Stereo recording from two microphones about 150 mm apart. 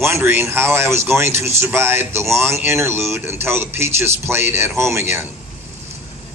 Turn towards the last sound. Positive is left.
turn(degrees=-15)  # may be behind; listen again after turning